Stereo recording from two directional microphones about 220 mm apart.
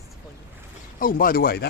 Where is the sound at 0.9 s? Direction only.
40° left (ahead or behind).